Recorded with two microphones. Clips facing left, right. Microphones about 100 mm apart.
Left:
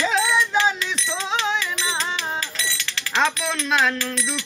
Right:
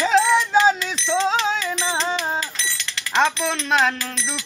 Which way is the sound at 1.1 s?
30° right (ahead or behind).